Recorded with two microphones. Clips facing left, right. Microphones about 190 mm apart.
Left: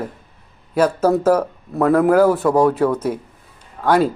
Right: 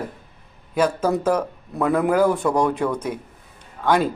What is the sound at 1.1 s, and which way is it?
Speech, 5° left (ahead or behind).